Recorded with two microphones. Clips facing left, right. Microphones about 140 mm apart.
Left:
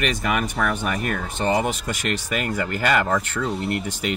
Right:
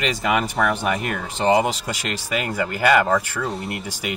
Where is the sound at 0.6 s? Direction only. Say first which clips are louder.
Right 3 dB; 5° right (ahead or behind).